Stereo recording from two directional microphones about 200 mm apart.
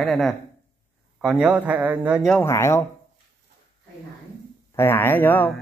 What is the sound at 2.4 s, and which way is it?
Speech, 15° left (ahead or behind).